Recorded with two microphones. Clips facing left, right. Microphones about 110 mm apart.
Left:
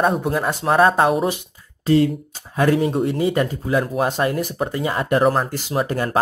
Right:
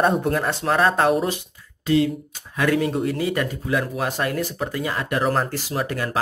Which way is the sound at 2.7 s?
25° left (ahead or behind).